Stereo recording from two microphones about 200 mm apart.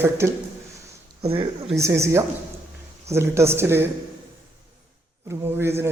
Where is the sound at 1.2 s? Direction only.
30° right (ahead or behind).